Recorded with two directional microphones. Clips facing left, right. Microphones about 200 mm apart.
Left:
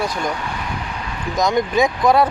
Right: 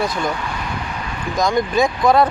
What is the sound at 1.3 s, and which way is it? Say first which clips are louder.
Speech: even; 20° left (ahead or behind).